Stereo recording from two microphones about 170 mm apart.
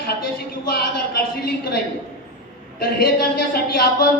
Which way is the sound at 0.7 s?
65° left (ahead or behind).